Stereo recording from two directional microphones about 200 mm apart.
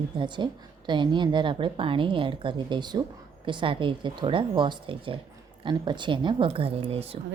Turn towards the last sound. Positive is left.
turn(degrees=-30)  # may be behind; listen again after turning